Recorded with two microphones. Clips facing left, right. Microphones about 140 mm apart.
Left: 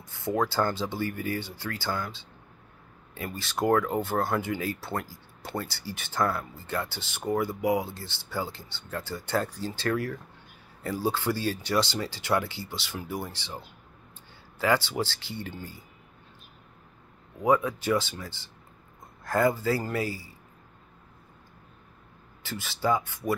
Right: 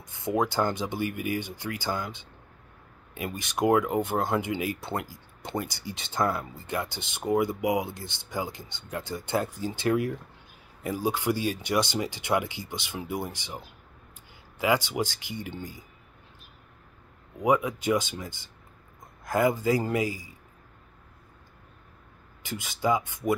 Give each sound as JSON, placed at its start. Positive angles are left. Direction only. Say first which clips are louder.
{"t": 0.0, "sound": "music", "louder": "even", "side_deg": -20}
{"t": 0.4, "sound": "speech", "louder": "right 1 dB", "side_deg": -15}
{"t": 14.6, "sound": "speech", "louder": "even", "side_deg": -15}
{"t": 17.4, "sound": "speech", "louder": "even", "side_deg": -15}
{"t": 22.4, "sound": "speech", "louder": "right 1 dB", "side_deg": -15}